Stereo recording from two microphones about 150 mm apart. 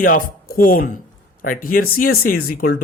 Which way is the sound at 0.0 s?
70° left (ahead or behind).